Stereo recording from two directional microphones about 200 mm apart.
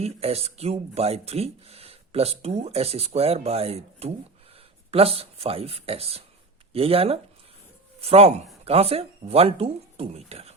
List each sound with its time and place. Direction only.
0.0 s speech: 30° right (ahead or behind)